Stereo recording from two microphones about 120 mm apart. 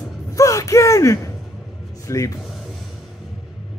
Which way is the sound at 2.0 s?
25° left (ahead or behind).